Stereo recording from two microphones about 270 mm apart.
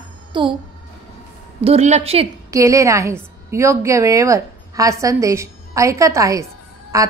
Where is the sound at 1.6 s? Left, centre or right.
Right.